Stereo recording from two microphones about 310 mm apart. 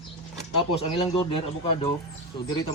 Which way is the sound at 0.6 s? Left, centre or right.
Centre.